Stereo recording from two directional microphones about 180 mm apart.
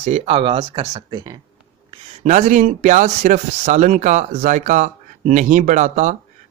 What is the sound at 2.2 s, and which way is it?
Speech, 45° right (ahead or behind).